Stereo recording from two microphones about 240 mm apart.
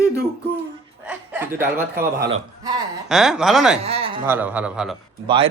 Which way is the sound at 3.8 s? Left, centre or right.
Right.